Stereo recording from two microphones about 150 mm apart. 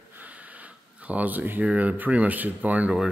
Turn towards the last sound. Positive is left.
turn(degrees=-5)  # may be behind; listen again after turning